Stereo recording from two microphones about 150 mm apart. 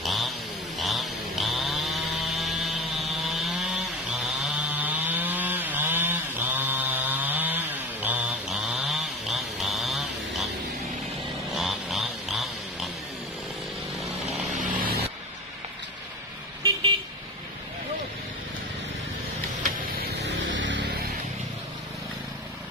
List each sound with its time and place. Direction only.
0.0 s a sound: centre (ahead or behind)
0.7 s chainsaw: centre (ahead or behind)
4.7 s wood: 10° right (ahead or behind)
11.5 s a sound: centre (ahead or behind)
14.6 s vehicle: 70° right (ahead or behind)
19.6 s vehicle: 90° right